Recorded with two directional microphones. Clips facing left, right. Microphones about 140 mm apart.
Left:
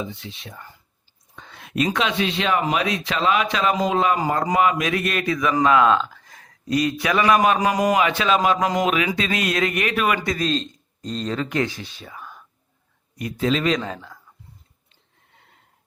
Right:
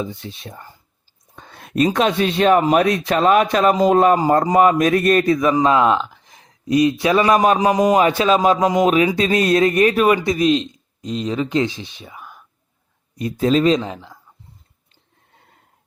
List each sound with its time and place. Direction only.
0.0 s a man's voice: 40° right (ahead or behind)
4.2 s a man's voice: 35° right (ahead or behind)
5.6 s speech: 25° right (ahead or behind)
7.9 s a man's voice: 40° right (ahead or behind)
10.2 s speech: 15° right (ahead or behind)
11.4 s speech: 25° right (ahead or behind)
13.1 s a man's voice: 35° right (ahead or behind)
13.8 s speech: 20° right (ahead or behind)